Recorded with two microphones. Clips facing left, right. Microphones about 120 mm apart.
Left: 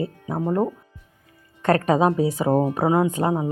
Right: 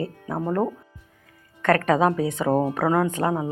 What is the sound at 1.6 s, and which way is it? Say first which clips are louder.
Speech: left 1 dB; 25° left (ahead or behind).